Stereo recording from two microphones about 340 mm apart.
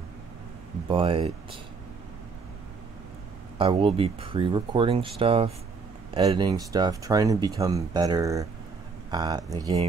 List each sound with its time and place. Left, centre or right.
0.8 s speech: centre
3.5 s speech: centre